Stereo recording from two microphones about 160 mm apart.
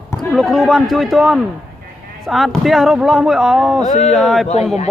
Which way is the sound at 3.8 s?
45° left (ahead or behind).